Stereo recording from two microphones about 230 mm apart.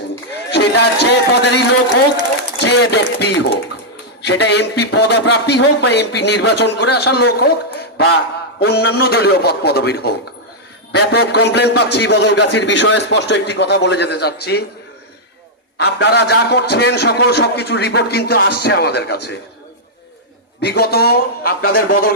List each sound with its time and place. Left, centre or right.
0.5 s a man's voice: left
15.8 s a man's voice: left
20.6 s a man's voice: left